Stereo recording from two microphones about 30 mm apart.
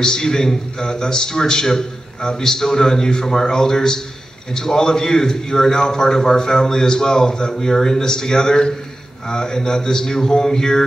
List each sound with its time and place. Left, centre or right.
0.0 s a man's voice: left